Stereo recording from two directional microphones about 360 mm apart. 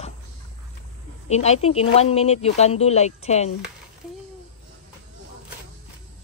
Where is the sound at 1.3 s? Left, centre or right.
Centre.